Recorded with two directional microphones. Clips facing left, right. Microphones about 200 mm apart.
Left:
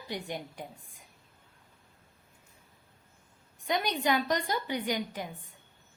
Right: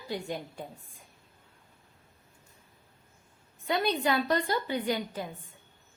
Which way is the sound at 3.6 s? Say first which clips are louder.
Right 1 dB; 15° left (ahead or behind).